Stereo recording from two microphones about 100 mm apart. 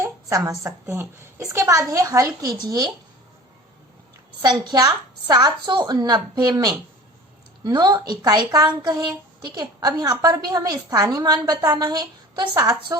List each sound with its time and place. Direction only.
0.0 s a woman's voice: 30° right (ahead or behind)
4.4 s a woman's voice: 45° right (ahead or behind)